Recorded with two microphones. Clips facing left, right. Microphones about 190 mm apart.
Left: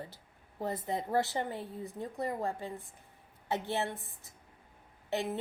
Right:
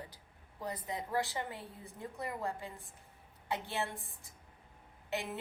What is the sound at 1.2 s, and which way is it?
Speech, 20° left (ahead or behind).